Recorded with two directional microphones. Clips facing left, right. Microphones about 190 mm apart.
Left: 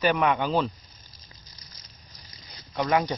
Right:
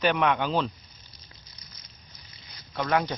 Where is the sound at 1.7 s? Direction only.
40° left (ahead or behind).